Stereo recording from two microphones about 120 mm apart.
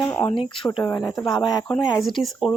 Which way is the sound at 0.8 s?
25° left (ahead or behind).